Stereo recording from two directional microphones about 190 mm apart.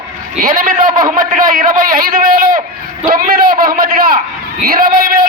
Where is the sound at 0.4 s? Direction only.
45° right (ahead or behind).